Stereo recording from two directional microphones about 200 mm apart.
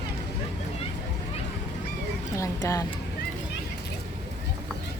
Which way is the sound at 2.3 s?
15° left (ahead or behind).